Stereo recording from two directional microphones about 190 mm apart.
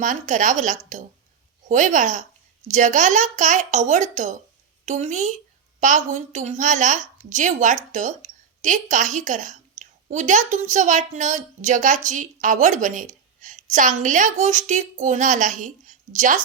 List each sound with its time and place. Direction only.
0.0 s a woman's voice: 40° right (ahead or behind)